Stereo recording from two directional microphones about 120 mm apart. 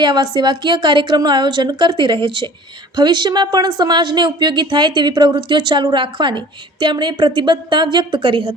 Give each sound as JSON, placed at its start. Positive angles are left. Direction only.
{"t": 0.0, "sound": "a woman's voice", "side_deg": -35}